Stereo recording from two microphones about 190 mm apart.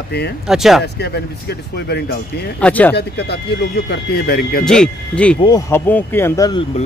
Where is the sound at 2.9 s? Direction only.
60° left (ahead or behind).